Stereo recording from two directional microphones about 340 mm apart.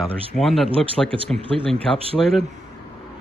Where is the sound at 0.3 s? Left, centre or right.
Centre.